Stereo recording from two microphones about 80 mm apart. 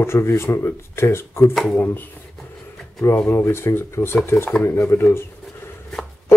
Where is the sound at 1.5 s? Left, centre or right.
Centre.